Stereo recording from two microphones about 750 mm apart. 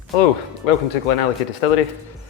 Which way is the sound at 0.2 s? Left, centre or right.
Left.